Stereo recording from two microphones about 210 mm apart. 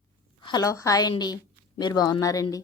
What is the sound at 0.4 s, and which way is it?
Speech, 15° left (ahead or behind).